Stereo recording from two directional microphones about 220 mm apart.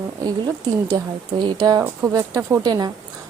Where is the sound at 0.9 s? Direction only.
20° right (ahead or behind).